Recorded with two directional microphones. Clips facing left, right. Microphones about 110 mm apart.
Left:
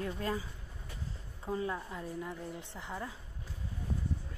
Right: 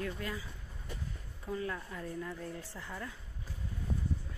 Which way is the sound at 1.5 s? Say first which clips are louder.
Left 2 dB; 25° left (ahead or behind).